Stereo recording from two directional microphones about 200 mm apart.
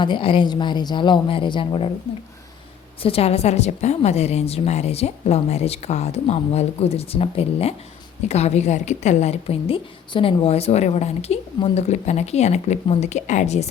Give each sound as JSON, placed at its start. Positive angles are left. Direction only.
{"t": 0.0, "sound": "speech", "side_deg": 25}
{"t": 3.0, "sound": "a woman's voice", "side_deg": 30}